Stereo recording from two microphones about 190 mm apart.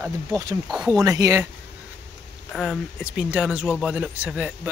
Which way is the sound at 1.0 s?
15° right (ahead or behind).